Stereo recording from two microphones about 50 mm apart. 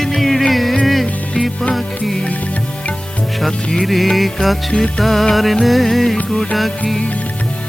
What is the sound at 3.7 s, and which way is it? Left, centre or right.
Music, centre.